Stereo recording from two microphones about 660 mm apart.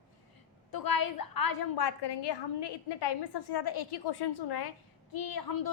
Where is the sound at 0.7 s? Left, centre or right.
Left.